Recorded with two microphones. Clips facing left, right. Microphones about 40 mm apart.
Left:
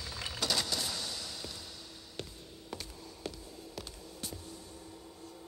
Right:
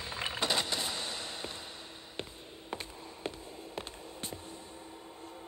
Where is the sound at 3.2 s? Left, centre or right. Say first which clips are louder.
Right 3 dB; right.